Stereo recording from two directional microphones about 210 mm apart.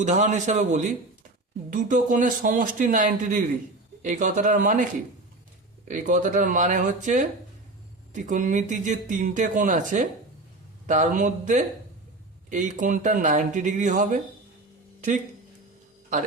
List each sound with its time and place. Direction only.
0.0 s speech: 35° right (ahead or behind)
5.9 s speech: 35° right (ahead or behind)